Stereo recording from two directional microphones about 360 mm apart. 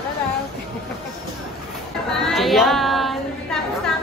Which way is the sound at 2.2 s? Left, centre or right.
Centre.